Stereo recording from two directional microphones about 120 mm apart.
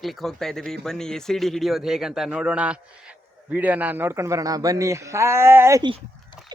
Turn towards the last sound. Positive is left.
turn(degrees=-20)  # may be behind; listen again after turning